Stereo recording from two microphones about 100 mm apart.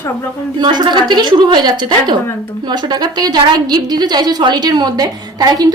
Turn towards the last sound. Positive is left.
turn(degrees=-40)  # may be behind; listen again after turning